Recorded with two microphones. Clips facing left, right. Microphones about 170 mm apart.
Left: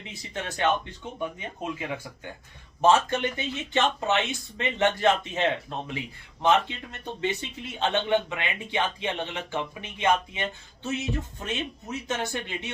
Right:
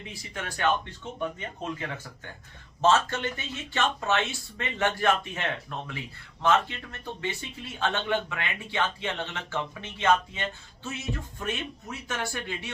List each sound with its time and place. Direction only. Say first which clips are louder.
0.1 s a man's voice: left 4 dB; 25° left (ahead or behind)